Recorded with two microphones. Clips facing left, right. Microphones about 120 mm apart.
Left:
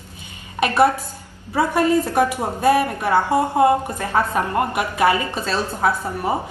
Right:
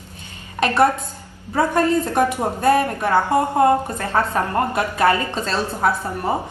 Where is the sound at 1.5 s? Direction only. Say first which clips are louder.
Even; 10° left (ahead or behind).